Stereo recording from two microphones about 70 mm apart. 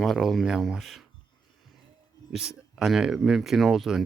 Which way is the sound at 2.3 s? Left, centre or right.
Centre.